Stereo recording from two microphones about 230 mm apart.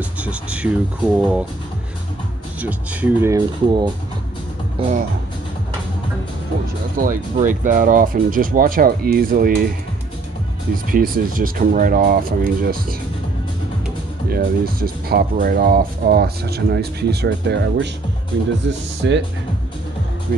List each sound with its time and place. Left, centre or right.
0.2 s speech: centre
2.6 s speech: centre; by 5.0 s right
7.0 s speech: right
10.9 s speech: right
14.3 s speech: right
20.3 s speech: right